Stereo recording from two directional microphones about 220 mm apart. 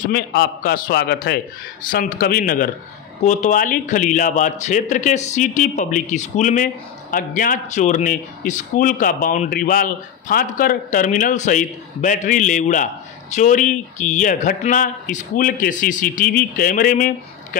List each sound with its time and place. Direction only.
0.0 s a man's voice: 45° left (ahead or behind)